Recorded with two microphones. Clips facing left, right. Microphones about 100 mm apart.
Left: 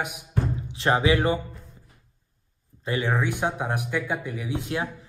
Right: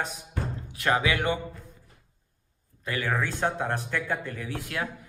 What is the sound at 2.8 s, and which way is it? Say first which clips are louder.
Speech: left 3 dB; 25° left (ahead or behind).